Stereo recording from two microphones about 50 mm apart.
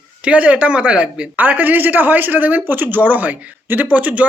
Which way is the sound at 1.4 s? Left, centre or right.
Right.